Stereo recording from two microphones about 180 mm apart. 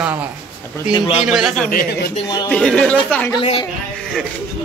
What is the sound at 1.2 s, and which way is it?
Speech, 5° right (ahead or behind).